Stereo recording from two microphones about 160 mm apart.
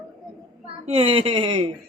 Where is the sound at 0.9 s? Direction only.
35° right (ahead or behind).